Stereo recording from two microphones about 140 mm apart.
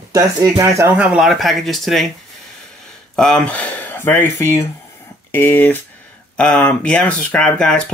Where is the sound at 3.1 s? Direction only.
5° left (ahead or behind).